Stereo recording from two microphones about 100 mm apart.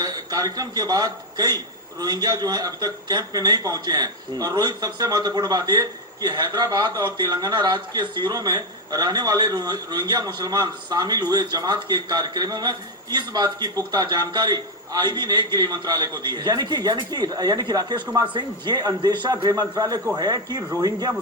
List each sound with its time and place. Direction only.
0.0 s a man's voice: 40° right (ahead or behind)